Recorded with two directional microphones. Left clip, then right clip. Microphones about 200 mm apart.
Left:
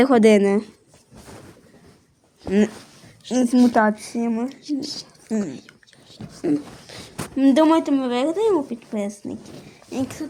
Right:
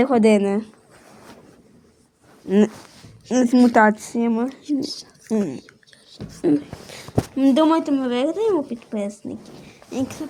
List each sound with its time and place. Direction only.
0.0 s speech: 20° left (ahead or behind)
2.5 s speech: 5° right (ahead or behind)
4.6 s speech: 5° left (ahead or behind)
5.3 s speech: 15° right (ahead or behind)
6.1 s a sound: 5° left (ahead or behind)
6.4 s speech: 10° right (ahead or behind)
7.3 s speech: 15° left (ahead or behind)